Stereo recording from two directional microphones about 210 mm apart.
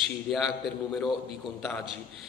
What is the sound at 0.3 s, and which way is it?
Speech, centre (ahead or behind).